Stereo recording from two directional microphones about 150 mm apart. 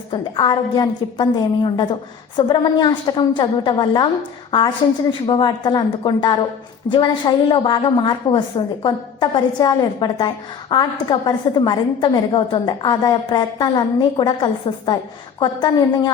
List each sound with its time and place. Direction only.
0.1 s a woman's voice: 30° left (ahead or behind)
5.2 s a woman's voice: 30° left (ahead or behind)